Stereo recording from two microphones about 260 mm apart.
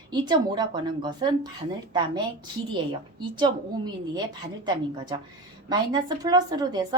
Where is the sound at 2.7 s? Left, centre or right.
Centre.